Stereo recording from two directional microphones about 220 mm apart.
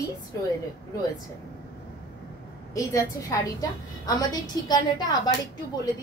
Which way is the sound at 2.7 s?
15° left (ahead or behind).